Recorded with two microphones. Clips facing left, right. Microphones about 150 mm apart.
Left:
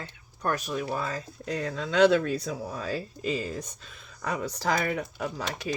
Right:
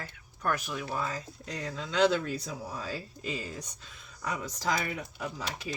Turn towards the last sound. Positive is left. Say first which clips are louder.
# left 5 dB
turn(degrees=65)  # may be behind; listen again after turning